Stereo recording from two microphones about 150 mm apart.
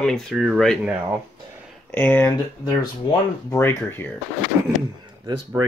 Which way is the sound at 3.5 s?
15° left (ahead or behind).